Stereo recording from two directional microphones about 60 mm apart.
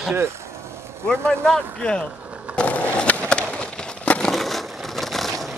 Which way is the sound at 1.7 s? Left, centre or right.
Centre.